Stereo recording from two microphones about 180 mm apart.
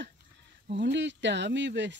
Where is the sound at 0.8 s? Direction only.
80° right.